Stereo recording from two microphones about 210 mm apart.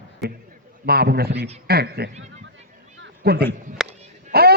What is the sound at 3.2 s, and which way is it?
Speech, 50° right (ahead or behind).